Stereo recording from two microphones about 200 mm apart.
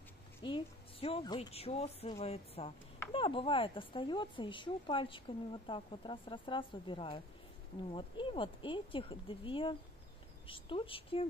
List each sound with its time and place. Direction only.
0.4 s speech: 25° left (ahead or behind)